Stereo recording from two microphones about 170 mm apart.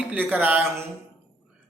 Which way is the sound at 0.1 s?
10° right (ahead or behind).